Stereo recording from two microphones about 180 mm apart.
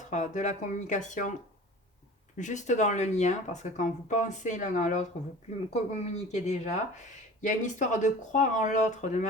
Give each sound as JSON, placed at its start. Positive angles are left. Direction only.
{"t": 0.1, "sound": "speech", "side_deg": 40}
{"t": 2.3, "sound": "speech", "side_deg": 45}